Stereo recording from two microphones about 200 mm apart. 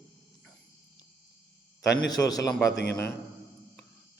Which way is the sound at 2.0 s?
20° left (ahead or behind).